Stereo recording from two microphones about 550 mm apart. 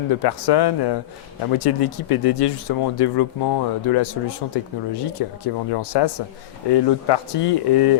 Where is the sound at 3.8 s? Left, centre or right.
Left.